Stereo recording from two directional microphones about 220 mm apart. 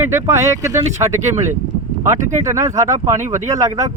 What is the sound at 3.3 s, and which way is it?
Speech, 35° right (ahead or behind).